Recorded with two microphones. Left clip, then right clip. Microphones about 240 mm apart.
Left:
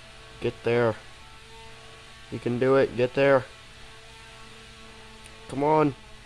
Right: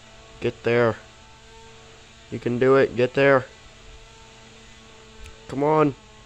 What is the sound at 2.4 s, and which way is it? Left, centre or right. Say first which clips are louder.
Speech: right 4 dB; centre.